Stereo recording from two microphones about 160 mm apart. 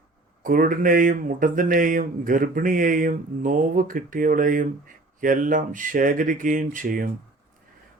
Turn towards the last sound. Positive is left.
turn(degrees=-60)  # may be behind; listen again after turning